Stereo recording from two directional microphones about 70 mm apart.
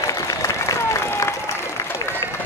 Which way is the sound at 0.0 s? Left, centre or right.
Left.